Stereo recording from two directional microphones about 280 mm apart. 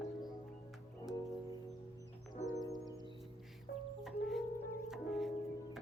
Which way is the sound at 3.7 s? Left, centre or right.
Left.